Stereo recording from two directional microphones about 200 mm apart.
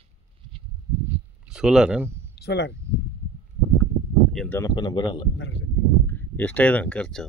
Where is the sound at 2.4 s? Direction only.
55° left (ahead or behind).